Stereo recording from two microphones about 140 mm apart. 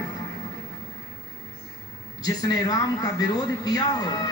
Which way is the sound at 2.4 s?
25° left (ahead or behind).